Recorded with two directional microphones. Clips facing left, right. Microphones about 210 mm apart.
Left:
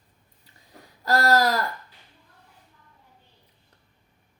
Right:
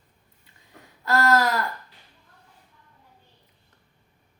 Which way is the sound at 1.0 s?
35° left (ahead or behind).